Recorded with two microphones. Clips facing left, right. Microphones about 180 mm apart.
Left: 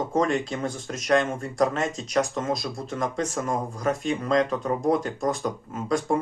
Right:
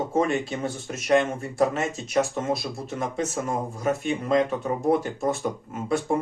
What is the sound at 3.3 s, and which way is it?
Speech, 25° right (ahead or behind).